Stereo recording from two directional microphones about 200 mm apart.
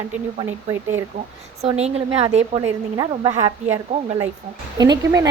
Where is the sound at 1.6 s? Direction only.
30° right (ahead or behind).